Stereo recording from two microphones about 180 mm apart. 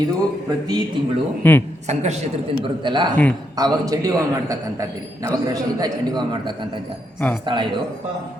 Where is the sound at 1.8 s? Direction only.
40° right (ahead or behind).